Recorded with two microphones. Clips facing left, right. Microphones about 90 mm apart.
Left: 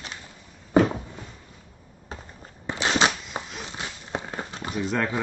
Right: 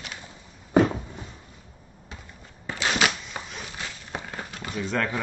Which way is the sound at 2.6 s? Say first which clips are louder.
Left 2 dB; 25° left (ahead or behind).